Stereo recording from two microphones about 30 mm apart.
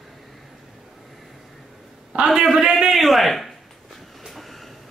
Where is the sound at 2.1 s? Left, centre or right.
Right.